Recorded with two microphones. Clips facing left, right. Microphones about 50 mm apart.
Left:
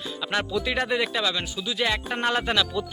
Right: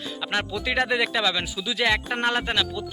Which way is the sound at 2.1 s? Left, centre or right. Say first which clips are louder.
Right 1 dB; right.